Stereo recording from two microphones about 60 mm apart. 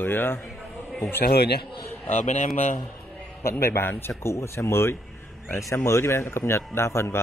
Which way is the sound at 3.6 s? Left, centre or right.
Left.